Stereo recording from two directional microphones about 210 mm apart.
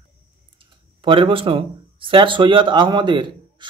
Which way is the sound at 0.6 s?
25° right (ahead or behind).